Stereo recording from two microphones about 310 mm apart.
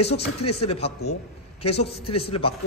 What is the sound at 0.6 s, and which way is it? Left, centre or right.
A man's voice, centre.